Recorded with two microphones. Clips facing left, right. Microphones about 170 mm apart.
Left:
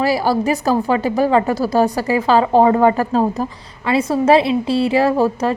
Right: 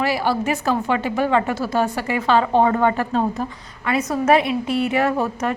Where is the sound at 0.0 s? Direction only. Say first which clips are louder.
Left 4 dB; 40° left (ahead or behind).